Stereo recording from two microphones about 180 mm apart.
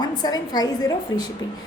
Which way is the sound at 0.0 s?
20° left (ahead or behind).